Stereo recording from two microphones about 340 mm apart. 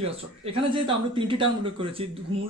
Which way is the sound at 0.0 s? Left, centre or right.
Centre.